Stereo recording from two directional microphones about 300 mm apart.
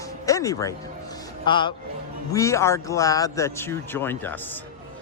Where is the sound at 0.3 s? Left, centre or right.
Centre.